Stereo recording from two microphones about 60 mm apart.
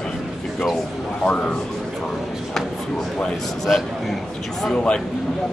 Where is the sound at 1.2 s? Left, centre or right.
Centre.